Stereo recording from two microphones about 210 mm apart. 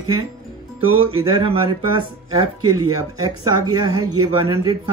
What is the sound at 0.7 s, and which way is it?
Speech, 25° right (ahead or behind).